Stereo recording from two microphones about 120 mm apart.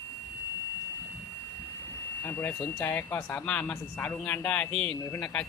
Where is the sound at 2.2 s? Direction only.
15° left (ahead or behind).